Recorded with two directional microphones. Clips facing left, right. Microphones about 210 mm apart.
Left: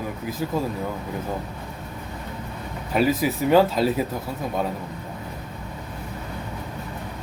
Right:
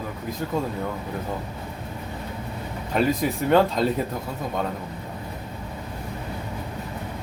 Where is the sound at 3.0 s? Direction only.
5° left (ahead or behind).